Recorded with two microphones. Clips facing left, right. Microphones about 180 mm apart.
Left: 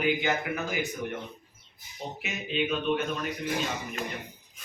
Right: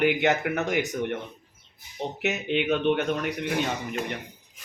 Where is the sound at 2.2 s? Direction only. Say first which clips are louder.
Right 5 dB; 75° right (ahead or behind).